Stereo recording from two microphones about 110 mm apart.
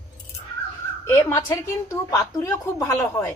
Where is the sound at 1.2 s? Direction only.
25° left (ahead or behind).